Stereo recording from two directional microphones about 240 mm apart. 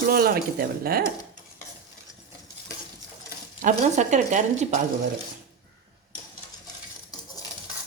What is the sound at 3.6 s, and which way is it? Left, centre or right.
Speech, right.